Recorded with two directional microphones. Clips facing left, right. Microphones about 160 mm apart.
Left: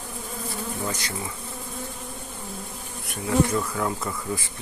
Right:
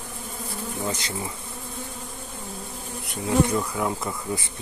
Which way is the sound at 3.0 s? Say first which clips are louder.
Right 1 dB; 20° right (ahead or behind).